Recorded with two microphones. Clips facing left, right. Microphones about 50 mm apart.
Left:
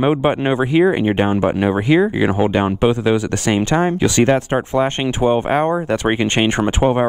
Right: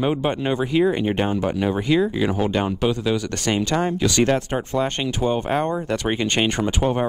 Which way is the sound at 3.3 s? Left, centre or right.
Centre.